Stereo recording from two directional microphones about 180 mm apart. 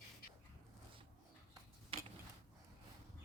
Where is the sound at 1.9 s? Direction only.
30° right (ahead or behind).